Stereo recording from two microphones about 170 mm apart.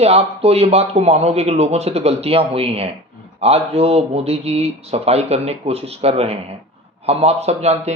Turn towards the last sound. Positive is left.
turn(degrees=-40)  # may be behind; listen again after turning